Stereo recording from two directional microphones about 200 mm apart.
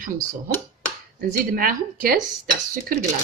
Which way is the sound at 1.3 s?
45° right (ahead or behind).